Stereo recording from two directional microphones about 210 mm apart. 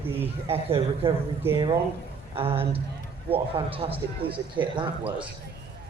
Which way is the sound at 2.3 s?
25° right (ahead or behind).